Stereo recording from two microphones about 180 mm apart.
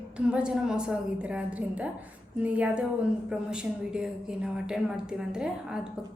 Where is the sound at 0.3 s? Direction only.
5° right (ahead or behind).